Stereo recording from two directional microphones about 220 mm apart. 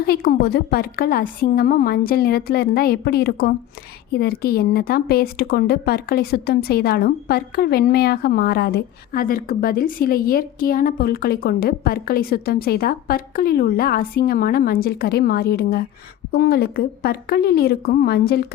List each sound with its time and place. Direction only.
0.0 s speech: 45° left (ahead or behind)